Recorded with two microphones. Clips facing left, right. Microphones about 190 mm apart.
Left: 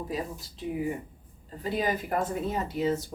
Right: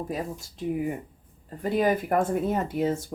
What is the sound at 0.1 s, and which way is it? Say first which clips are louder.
Speech: right 2 dB; 50° right (ahead or behind).